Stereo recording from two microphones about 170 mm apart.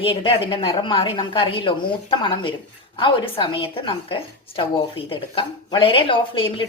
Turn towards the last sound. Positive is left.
turn(degrees=30)  # may be behind; listen again after turning